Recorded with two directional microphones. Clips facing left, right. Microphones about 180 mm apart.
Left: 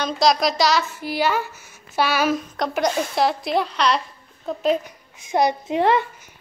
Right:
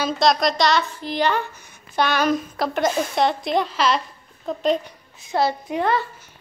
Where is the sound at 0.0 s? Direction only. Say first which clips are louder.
Even; centre (ahead or behind).